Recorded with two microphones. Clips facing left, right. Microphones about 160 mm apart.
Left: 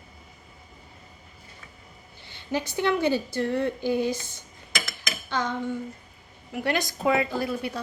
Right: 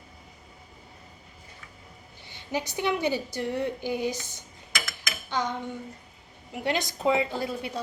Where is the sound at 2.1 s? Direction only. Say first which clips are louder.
Left 2 dB; 15° right (ahead or behind).